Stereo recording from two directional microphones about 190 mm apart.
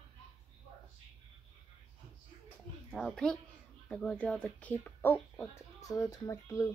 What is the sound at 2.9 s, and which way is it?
A child's voice, 5° left (ahead or behind).